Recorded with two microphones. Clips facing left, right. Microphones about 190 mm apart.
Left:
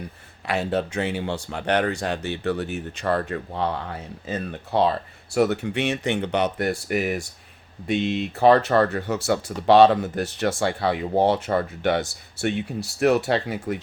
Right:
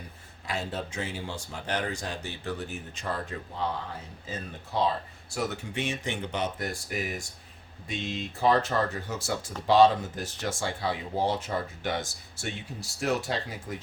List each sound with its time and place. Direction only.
0.4 s speech: 70° left (ahead or behind)